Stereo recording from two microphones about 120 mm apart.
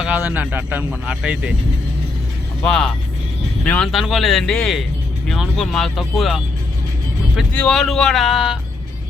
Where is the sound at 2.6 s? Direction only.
5° left (ahead or behind).